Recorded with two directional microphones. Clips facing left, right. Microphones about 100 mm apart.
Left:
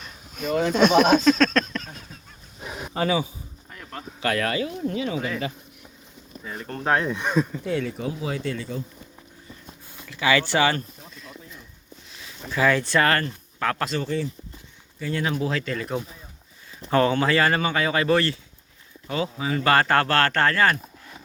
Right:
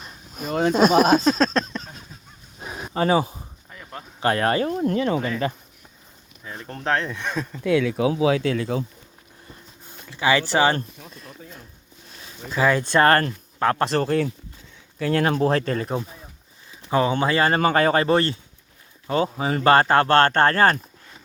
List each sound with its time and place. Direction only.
0.0 s speech: 35° right (ahead or behind)
2.9 s speech: 40° right (ahead or behind)
3.7 s a sound: 5° right (ahead or behind)
4.2 s speech: 35° right (ahead or behind)
4.5 s speech: 50° right (ahead or behind)
6.4 s speech: centre (ahead or behind); by 7.3 s 15° left (ahead or behind)
7.6 s speech: 75° right (ahead or behind)
10.0 s speech: 25° right (ahead or behind)
12.5 s speech: 20° right (ahead or behind)
13.0 s speech: 35° right (ahead or behind)
13.9 s speech: 55° right (ahead or behind); by 16.0 s 35° right (ahead or behind)
16.9 s speech: 15° right (ahead or behind)
17.6 s speech: 45° right (ahead or behind)